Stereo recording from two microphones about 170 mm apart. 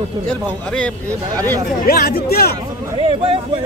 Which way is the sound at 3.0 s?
30° right (ahead or behind).